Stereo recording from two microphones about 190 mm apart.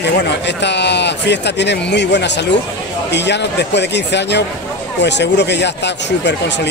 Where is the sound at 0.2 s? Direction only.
65° left (ahead or behind).